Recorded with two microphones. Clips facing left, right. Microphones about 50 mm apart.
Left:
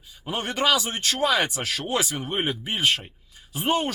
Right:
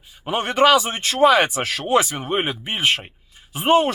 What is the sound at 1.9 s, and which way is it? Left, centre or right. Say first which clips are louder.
Speech: right 9 dB; centre.